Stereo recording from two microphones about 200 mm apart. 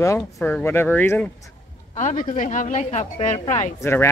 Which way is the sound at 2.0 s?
35° left (ahead or behind).